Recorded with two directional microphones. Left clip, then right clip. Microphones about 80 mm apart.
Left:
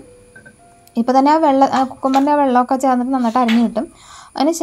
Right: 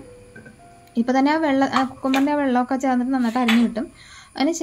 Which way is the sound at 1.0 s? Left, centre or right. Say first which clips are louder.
Left 7 dB; left.